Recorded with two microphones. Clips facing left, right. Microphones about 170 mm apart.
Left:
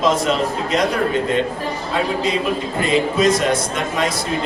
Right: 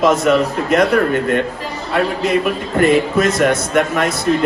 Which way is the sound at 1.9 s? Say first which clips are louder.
Right 5 dB; 55° right (ahead or behind).